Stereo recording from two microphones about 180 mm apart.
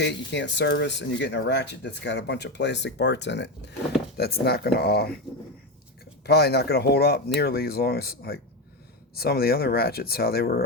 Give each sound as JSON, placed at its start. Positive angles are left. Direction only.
{"t": 0.0, "sound": "speech", "side_deg": 80}
{"t": 4.2, "sound": "speech", "side_deg": 60}
{"t": 6.2, "sound": "speech", "side_deg": 65}